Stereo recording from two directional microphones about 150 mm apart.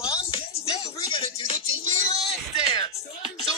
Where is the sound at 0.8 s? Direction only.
35° left (ahead or behind).